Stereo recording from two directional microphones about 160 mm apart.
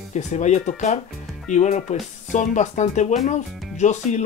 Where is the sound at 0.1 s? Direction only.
50° left (ahead or behind).